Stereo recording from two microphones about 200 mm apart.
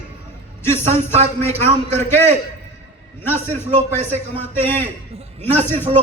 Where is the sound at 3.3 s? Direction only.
35° right (ahead or behind).